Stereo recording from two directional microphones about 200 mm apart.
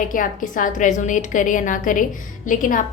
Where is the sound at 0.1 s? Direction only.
45° left (ahead or behind).